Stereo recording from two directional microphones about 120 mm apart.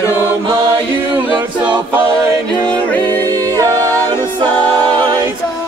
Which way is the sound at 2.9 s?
15° left (ahead or behind).